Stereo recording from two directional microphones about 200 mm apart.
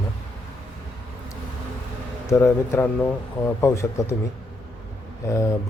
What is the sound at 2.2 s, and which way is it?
Speech, 15° left (ahead or behind).